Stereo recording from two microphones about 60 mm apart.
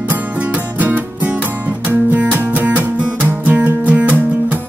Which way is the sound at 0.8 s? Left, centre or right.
Right.